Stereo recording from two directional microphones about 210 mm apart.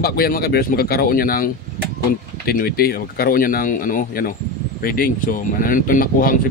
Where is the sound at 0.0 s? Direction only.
45° left (ahead or behind).